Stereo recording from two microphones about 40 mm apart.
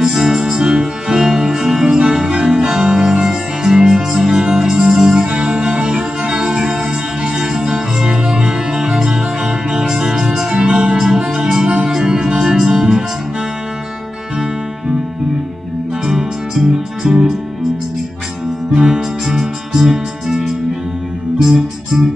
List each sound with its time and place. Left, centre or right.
0.0 s music: centre
11.0 s music: centre
17.0 s music: centre
18.7 s music: centre